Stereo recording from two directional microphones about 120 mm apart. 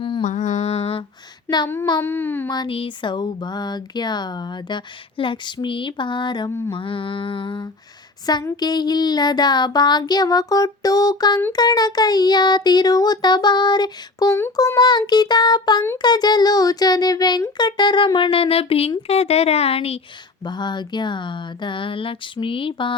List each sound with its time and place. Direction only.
0.2 s mantra: 90° left; by 1.0 s 60° left (ahead or behind)
1.5 s child singing: 35° left (ahead or behind)
2.0 s speech: 20° left (ahead or behind)
2.6 s speech: 45° left (ahead or behind)
6.5 s mantra: 20° left (ahead or behind)
6.7 s speech: 45° left (ahead or behind)
20.4 s speech: 40° left (ahead or behind)